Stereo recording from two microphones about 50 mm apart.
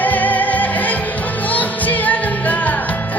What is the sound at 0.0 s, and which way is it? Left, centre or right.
Music, left.